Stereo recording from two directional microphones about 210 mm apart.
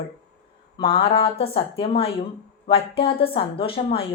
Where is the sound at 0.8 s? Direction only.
25° left (ahead or behind).